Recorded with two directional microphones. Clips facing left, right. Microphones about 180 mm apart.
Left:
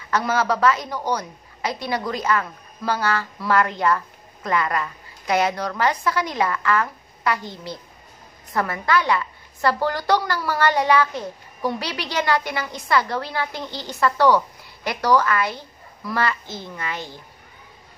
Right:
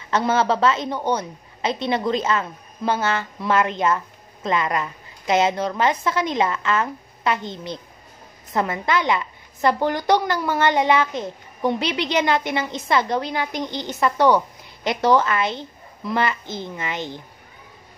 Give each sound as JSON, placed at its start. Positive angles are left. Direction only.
{"t": 0.1, "sound": "a woman's voice", "side_deg": -25}